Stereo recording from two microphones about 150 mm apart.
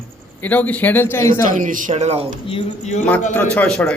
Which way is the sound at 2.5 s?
45° left (ahead or behind).